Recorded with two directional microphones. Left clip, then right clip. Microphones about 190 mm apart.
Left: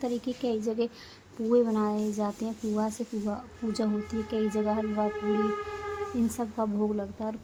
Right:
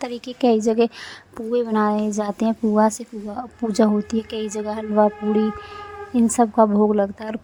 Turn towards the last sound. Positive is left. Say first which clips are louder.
# right 12 dB
turn(degrees=-40)  # may be behind; listen again after turning